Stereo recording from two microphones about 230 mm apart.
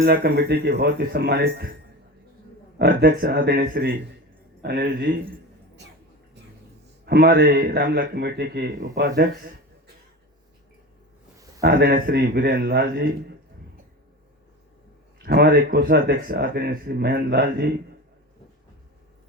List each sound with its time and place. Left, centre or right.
0.0 s speech: right
2.7 s speech: right
7.0 s speech: right
11.6 s speech: right
15.2 s speech: right